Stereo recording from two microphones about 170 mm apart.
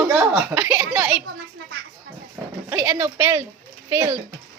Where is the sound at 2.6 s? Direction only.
10° right (ahead or behind).